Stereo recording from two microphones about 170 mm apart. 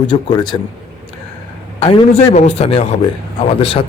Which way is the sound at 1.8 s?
35° left (ahead or behind).